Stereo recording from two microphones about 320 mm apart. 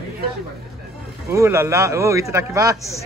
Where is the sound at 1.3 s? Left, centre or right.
Centre.